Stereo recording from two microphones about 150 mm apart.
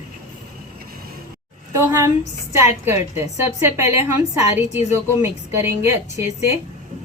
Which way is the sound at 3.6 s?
15° right (ahead or behind).